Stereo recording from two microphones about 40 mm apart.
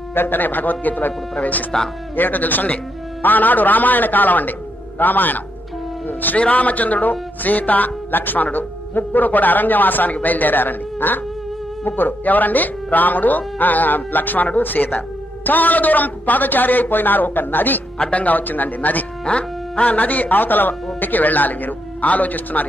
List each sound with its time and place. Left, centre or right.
0.1 s a man's voice: left
17.9 s speech: left
19.2 s music: left
19.9 s speech: left